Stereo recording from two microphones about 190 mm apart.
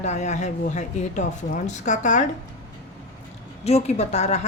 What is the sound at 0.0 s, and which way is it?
A woman's voice, 40° left (ahead or behind).